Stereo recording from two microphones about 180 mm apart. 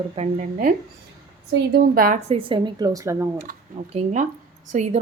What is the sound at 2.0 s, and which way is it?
Speech, 50° right (ahead or behind).